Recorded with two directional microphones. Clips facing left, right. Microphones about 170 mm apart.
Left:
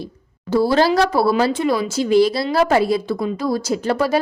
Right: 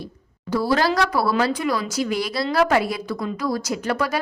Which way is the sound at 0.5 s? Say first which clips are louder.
Left 5 dB; 25° left (ahead or behind).